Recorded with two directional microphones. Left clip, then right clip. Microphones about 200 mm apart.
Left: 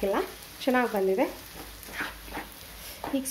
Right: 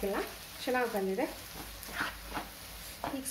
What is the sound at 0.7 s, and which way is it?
Speech, 50° left (ahead or behind).